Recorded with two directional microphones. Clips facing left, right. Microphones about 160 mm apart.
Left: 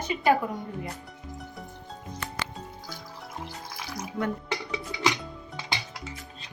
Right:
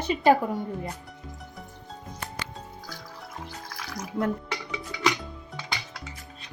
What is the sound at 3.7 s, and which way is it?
Music, 20° left (ahead or behind).